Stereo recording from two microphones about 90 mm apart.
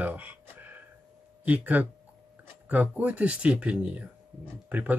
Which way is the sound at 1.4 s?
15° right (ahead or behind).